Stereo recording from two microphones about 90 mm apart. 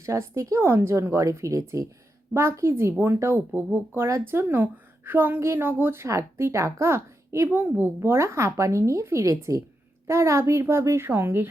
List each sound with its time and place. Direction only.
0.0 s a woman's voice: 35° right (ahead or behind)